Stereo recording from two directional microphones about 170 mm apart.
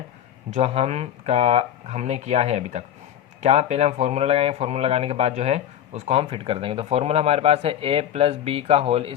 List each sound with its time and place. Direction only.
0.5 s speech: 35° right (ahead or behind)